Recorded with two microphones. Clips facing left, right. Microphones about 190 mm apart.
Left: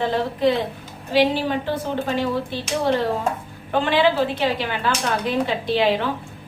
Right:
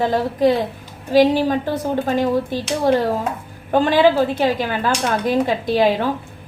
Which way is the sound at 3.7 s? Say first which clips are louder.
Right 4 dB; 45° right (ahead or behind).